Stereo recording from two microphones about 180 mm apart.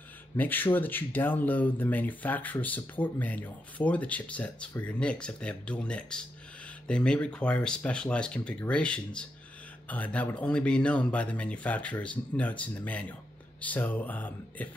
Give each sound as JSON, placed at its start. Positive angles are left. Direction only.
{"t": 0.4, "sound": "speech", "side_deg": 10}